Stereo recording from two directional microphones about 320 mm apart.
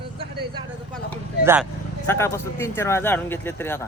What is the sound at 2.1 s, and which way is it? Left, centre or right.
Speech, centre.